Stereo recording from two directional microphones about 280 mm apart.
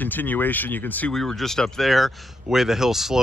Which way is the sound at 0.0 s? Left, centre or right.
Centre.